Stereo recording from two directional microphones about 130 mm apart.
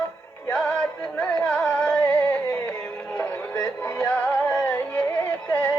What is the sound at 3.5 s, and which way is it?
Music, 25° left (ahead or behind).